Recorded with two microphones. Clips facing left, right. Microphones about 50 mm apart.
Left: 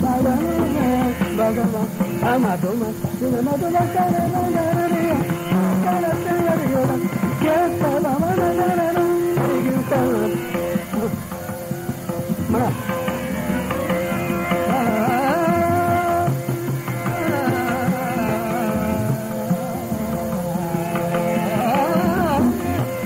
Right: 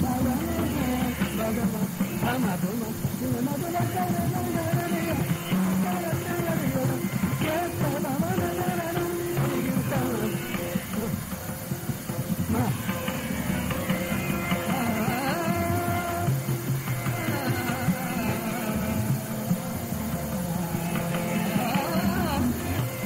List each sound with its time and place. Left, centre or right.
0.0 s music: left
2.2 s speech: left
3.7 s music: left
14.5 s music: left
17.3 s music: left
21.1 s music: left